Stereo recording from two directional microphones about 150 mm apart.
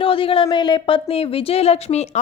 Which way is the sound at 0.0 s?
35° left (ahead or behind).